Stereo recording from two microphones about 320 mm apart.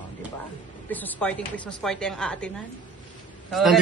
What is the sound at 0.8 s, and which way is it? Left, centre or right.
Speech, centre.